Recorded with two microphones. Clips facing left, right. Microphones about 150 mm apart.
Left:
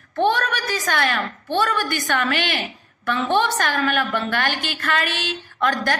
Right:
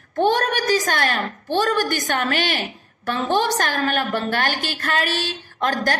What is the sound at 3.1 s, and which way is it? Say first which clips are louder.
A woman's voice: even; 40° right (ahead or behind).